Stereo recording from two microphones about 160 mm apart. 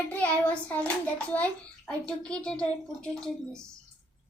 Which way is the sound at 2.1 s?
5° left (ahead or behind).